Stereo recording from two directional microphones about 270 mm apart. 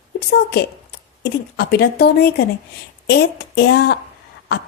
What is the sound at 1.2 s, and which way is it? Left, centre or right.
A woman's voice, left.